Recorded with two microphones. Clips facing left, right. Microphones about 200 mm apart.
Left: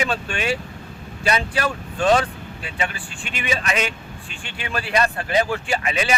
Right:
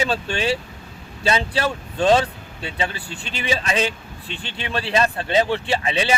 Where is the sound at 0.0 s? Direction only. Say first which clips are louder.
Right 2 dB; 30° right (ahead or behind).